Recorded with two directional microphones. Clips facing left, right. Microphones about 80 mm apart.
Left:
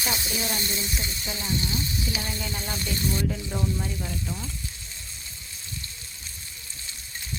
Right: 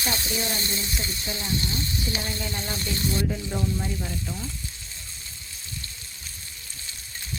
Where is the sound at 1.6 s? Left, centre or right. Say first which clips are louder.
Even; centre.